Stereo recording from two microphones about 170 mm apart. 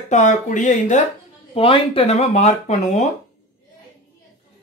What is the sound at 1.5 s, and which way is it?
Speech, 35° left (ahead or behind).